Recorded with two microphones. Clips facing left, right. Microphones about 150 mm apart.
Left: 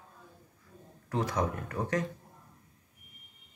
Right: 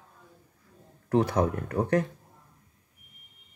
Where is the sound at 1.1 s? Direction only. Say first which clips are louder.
Right 7 dB; 60° right (ahead or behind).